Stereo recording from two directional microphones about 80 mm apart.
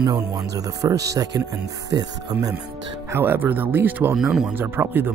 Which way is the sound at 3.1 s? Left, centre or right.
Right.